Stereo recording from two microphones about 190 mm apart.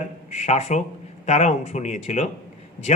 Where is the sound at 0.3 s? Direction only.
35° left (ahead or behind).